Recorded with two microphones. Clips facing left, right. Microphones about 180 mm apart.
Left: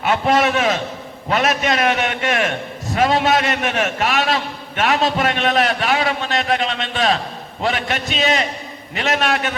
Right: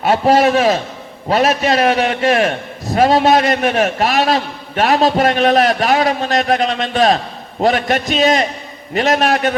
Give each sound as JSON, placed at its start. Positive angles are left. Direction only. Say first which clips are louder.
{"t": 0.0, "sound": "a man's voice", "louder": "right 5 dB", "side_deg": -35}